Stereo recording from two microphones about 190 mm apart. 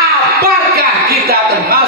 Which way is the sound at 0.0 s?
55° right (ahead or behind).